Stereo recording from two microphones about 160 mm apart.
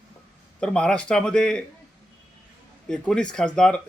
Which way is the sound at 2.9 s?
5° left (ahead or behind).